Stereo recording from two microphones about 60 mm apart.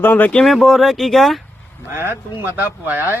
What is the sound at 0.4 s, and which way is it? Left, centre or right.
Speech, centre.